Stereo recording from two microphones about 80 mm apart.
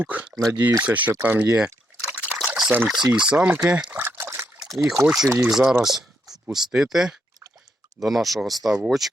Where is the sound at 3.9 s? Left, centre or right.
Right.